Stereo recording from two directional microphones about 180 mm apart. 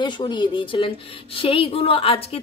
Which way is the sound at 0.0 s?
25° left (ahead or behind).